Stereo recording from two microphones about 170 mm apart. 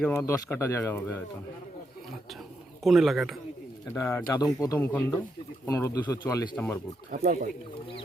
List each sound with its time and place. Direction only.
0.2 s speech: 20° left (ahead or behind)
2.8 s speech: centre (ahead or behind)
3.8 s speech: 15° left (ahead or behind)
7.1 s speech: 55° right (ahead or behind)